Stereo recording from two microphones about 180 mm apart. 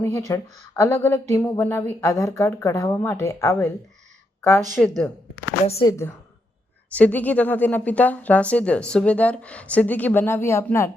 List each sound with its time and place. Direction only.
0.3 s speech: 15° left (ahead or behind)
4.4 s a sound: 15° left (ahead or behind)
4.7 s a woman's voice: 5° left (ahead or behind)
5.6 s speech: 35° left (ahead or behind)
5.9 s speech: 15° left (ahead or behind)